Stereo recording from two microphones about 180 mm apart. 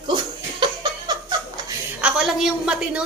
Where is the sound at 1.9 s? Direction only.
5° right (ahead or behind).